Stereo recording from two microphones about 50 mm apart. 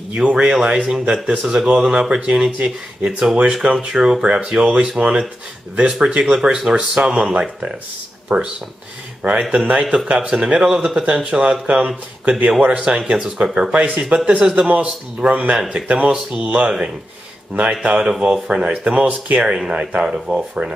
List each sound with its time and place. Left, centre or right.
0.1 s speech: centre
12.5 s speech: right
14.7 s speech: right
19.0 s speech: right
19.4 s speech: centre